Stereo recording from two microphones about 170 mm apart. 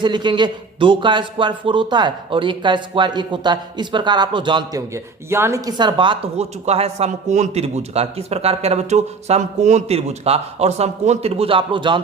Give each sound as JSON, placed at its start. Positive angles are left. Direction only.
{"t": 0.0, "sound": "speech", "side_deg": -25}